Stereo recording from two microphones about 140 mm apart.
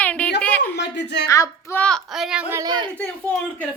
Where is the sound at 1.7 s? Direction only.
10° left (ahead or behind).